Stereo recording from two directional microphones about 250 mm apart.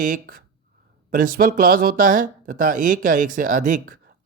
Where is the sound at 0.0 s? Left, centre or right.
Right.